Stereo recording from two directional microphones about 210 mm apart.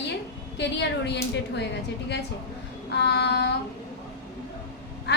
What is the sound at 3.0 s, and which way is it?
Speech, 55° left (ahead or behind).